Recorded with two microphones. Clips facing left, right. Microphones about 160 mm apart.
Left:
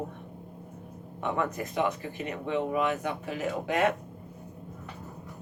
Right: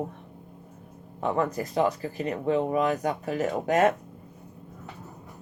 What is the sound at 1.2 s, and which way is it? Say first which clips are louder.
Speech: right 4 dB; 35° right (ahead or behind).